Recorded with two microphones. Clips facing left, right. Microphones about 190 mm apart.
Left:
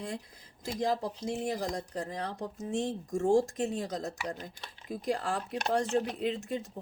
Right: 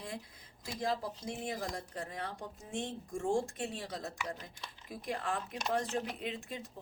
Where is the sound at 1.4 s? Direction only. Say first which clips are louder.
Left 5 dB; 40° left (ahead or behind).